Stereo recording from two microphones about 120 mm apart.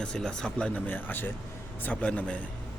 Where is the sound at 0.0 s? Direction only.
5° left (ahead or behind).